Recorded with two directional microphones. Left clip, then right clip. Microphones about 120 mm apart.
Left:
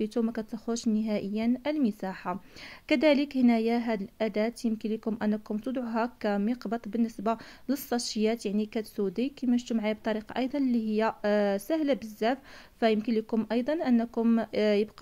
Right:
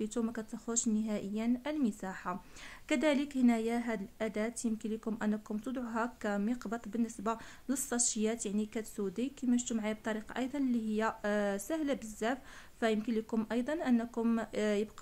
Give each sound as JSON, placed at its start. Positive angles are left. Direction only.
{"t": 0.0, "sound": "speech", "side_deg": 25}